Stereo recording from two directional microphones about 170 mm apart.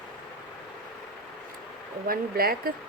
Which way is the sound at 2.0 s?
60° right (ahead or behind).